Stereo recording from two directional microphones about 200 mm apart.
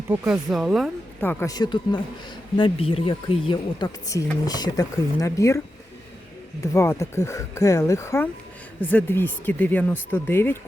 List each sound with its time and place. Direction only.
0.1 s speech: 5° right (ahead or behind)
1.2 s speech: 10° left (ahead or behind)